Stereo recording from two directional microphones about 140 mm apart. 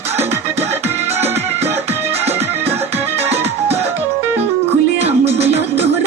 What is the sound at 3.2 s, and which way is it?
Music, 15° right (ahead or behind).